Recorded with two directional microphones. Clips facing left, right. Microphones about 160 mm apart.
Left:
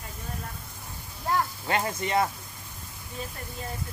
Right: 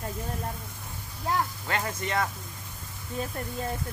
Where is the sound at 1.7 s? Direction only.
25° left (ahead or behind).